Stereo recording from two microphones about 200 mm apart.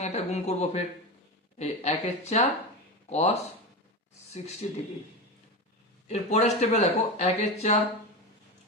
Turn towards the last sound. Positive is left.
turn(degrees=35)  # may be behind; listen again after turning